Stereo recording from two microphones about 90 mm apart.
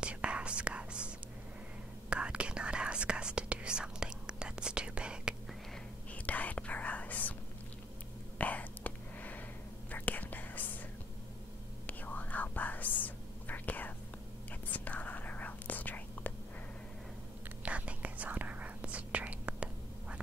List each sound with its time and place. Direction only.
0.0 s whispering: 10° right (ahead or behind)
6.2 s whispering: 15° left (ahead or behind)
8.4 s whispering: 15° left (ahead or behind)
11.8 s whispering: 20° left (ahead or behind)
17.6 s whispering: 15° right (ahead or behind)